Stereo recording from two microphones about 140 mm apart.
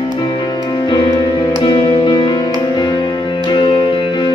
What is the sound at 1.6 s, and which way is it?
Music, 35° left (ahead or behind).